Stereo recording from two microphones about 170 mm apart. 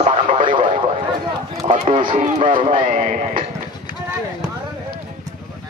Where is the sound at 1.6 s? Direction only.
40° right (ahead or behind).